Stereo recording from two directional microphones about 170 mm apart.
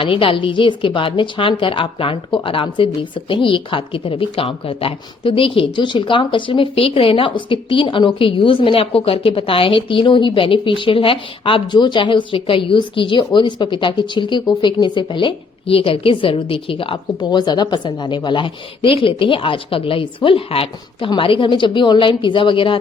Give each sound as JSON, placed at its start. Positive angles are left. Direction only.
{"t": 0.0, "sound": "a woman's voice", "side_deg": 30}